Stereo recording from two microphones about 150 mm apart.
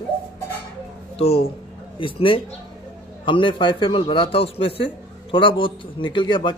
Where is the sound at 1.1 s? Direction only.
40° left (ahead or behind).